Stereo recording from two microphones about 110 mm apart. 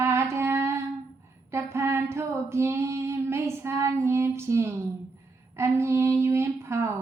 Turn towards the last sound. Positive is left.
turn(degrees=-25)  # may be behind; listen again after turning